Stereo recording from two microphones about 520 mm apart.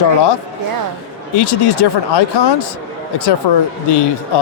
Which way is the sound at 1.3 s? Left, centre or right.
Left.